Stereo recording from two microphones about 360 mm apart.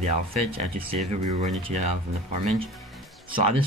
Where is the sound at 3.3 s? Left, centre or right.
Centre.